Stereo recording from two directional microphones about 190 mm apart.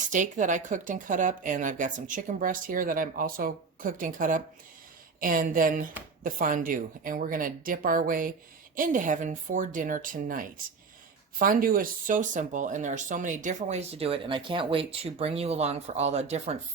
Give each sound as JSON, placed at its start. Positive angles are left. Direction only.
{"t": 0.1, "sound": "a woman's voice", "side_deg": -40}